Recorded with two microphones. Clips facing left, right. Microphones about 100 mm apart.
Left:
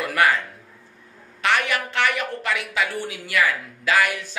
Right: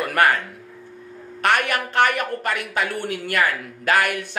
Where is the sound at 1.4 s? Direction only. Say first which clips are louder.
Right 2 dB; 50° right (ahead or behind).